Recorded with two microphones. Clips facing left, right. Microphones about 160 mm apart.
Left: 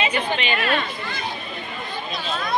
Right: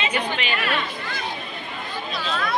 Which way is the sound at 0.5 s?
25° left (ahead or behind).